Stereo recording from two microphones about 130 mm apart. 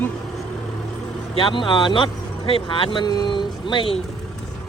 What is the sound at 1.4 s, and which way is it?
Speech, 40° left (ahead or behind).